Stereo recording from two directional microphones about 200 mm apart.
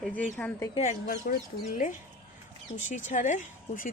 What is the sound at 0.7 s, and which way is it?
Speech, 35° left (ahead or behind).